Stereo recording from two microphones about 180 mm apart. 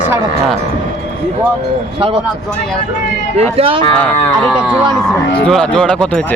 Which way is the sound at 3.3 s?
30° right (ahead or behind).